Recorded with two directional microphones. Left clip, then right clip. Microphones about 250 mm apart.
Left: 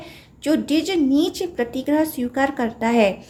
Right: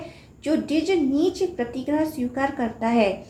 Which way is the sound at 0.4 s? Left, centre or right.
Left.